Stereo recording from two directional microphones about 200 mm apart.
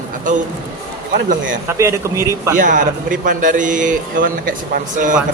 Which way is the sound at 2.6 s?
40° right (ahead or behind).